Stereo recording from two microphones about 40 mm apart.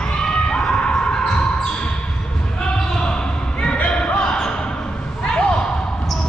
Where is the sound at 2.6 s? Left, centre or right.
Left.